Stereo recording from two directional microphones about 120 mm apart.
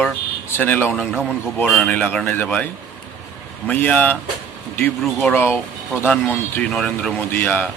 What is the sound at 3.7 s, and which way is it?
Speech, 10° left (ahead or behind).